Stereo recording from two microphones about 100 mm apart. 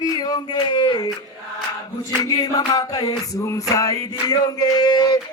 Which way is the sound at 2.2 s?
40° left (ahead or behind).